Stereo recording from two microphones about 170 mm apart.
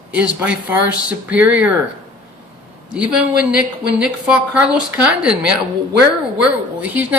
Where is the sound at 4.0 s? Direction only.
5° right (ahead or behind).